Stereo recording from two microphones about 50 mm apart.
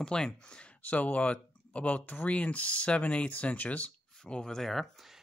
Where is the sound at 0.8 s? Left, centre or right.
Left.